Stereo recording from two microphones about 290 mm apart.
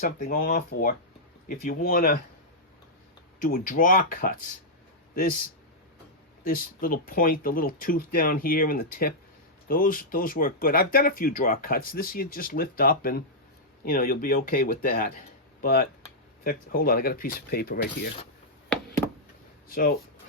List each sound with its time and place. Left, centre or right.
0.0 s speech: left
3.4 s speech: left
6.4 s speech: left
19.6 s speech: left